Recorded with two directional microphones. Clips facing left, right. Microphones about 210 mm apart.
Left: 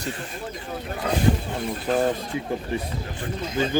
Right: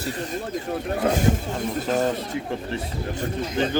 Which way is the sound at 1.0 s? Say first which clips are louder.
Right 1 dB; 45° right (ahead or behind).